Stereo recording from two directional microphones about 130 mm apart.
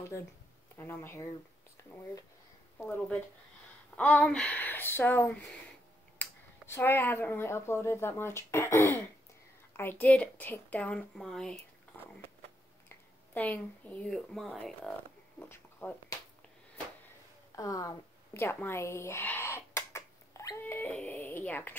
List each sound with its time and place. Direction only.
0.7 s speech: 15° left (ahead or behind)
3.9 s a woman's voice: 10° left (ahead or behind)
12.8 s speech: 15° left (ahead or behind)
15.4 s speech: 20° left (ahead or behind)
17.6 s speech: 25° left (ahead or behind)